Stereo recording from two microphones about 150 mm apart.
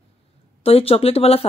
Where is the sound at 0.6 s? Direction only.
40° left (ahead or behind).